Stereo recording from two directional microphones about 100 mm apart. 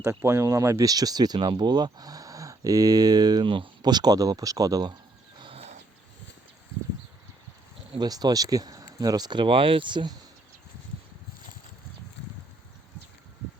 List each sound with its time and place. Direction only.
0.0 s speech: 30° right (ahead or behind)
5.4 s horse: 75° right (ahead or behind)
7.9 s speech: 40° right (ahead or behind)